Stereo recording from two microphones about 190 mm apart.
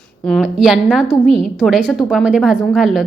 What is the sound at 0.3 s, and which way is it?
Speech, centre (ahead or behind).